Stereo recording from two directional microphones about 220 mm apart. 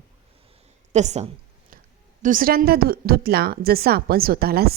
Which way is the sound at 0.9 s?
30° right (ahead or behind).